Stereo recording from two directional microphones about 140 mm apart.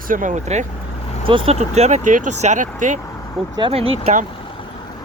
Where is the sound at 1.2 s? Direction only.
45° right (ahead or behind); by 3.0 s 65° right (ahead or behind).